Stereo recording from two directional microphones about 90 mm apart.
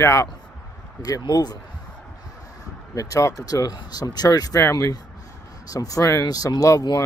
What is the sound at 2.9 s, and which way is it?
Speech, 40° left (ahead or behind).